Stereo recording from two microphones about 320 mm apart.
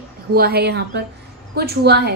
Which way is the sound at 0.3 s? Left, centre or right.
Right.